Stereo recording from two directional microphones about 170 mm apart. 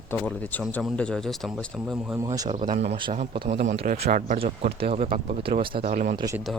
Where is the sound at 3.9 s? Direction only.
45° right (ahead or behind).